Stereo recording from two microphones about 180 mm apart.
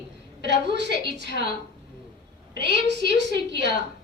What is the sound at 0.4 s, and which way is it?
A woman's voice, 75° right (ahead or behind).